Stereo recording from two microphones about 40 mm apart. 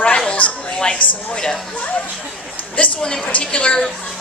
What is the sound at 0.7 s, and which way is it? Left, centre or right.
Speech, left.